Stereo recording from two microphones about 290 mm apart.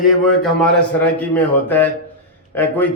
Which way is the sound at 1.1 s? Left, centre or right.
Centre.